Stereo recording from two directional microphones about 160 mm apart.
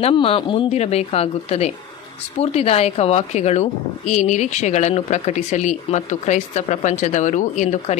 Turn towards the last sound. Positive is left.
turn(degrees=45)  # may be behind; listen again after turning